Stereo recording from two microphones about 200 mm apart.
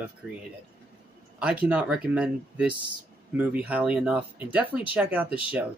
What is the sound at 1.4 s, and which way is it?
Speech, 5° right (ahead or behind).